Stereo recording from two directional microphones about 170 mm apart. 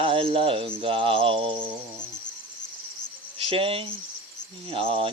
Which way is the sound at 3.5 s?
30° right (ahead or behind).